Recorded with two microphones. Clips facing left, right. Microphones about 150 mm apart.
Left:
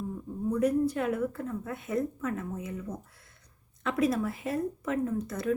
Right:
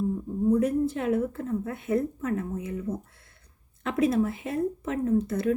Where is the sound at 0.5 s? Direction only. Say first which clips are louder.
Even; 30° right (ahead or behind).